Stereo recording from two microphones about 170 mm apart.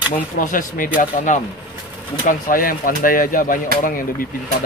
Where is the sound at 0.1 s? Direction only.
55° left (ahead or behind).